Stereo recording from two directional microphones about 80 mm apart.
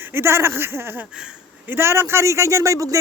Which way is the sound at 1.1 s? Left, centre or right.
Centre.